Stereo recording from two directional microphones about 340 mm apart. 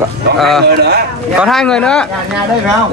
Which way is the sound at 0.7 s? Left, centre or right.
Right.